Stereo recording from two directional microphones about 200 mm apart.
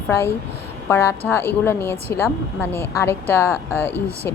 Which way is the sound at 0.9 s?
15° left (ahead or behind).